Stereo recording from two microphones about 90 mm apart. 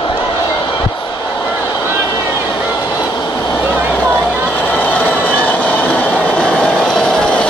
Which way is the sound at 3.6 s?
20° right (ahead or behind).